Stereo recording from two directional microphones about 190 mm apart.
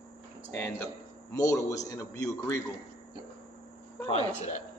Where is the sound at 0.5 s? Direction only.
10° left (ahead or behind).